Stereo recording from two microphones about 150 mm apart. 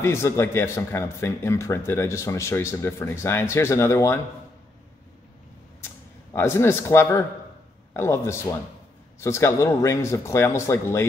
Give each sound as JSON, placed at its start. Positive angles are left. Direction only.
{"t": 0.0, "sound": "speech", "side_deg": 20}
{"t": 6.3, "sound": "speech", "side_deg": 15}